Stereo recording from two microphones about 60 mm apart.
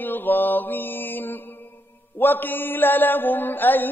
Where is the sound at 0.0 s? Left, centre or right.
Left.